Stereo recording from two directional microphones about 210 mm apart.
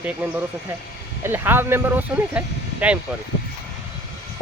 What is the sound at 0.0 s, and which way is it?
Speech, 10° right (ahead or behind).